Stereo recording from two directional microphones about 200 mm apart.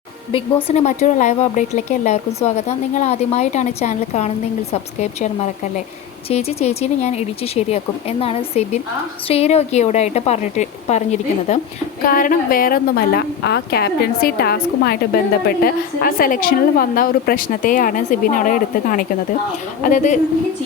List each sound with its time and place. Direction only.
0.3 s a woman's voice: 30° left (ahead or behind)